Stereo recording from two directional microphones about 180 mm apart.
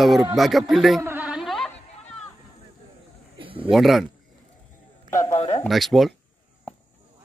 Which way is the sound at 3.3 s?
30° right (ahead or behind).